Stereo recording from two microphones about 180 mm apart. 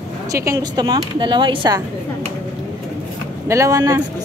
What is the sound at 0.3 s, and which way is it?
Speech, 20° right (ahead or behind).